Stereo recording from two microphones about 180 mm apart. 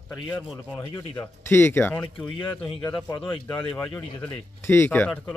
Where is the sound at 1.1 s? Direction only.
10° left (ahead or behind).